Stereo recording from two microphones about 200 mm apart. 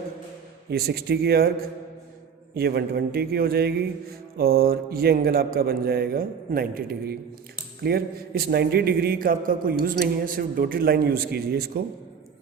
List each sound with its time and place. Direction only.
0.7 s speech: 50° right (ahead or behind)
2.6 s speech: 55° right (ahead or behind)